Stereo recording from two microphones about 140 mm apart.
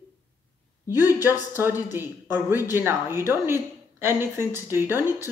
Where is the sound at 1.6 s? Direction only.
15° right (ahead or behind).